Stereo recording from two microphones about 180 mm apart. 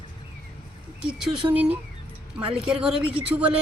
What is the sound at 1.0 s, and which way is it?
Speech, 5° right (ahead or behind).